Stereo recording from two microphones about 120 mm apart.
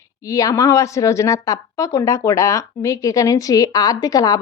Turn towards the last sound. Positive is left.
turn(degrees=30)  # may be behind; listen again after turning